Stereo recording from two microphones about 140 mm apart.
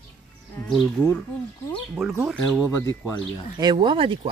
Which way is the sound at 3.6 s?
35° right (ahead or behind).